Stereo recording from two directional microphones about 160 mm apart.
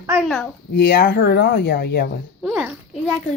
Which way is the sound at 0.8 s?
90° left.